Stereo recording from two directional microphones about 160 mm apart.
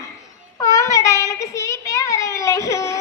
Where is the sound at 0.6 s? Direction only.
20° left (ahead or behind).